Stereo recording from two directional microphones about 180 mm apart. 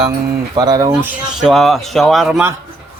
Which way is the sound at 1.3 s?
Centre (ahead or behind).